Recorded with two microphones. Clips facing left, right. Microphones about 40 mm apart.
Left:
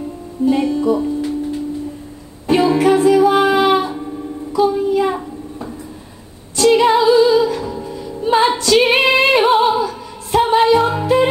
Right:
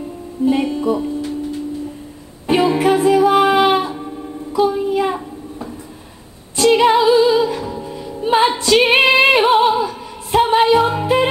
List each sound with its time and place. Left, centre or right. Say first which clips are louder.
0.5 s speech: left 2 dB; right
2.4 s music: left 1 dB; centre
4.7 s child singing: left 2 dB; centre
6.5 s music: even; centre
8.5 s female singing: even; centre
9.4 s music: even; centre